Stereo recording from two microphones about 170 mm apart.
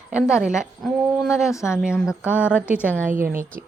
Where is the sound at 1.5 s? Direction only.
15° left (ahead or behind).